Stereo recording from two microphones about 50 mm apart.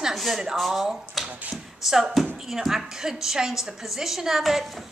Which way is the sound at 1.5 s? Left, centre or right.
Centre.